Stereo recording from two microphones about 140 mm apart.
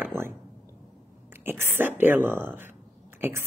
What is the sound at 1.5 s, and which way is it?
Speech, 15° right (ahead or behind).